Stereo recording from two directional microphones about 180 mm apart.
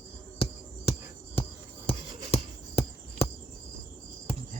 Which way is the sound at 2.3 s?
35° left (ahead or behind).